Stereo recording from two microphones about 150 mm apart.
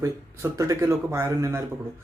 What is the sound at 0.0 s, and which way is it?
Speech, 20° right (ahead or behind).